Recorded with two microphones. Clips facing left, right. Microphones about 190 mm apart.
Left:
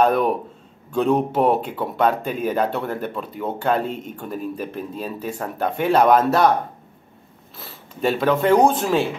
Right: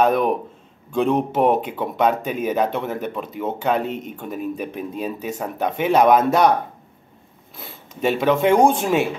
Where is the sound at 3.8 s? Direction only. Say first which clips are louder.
Right 1 dB; 40° left (ahead or behind).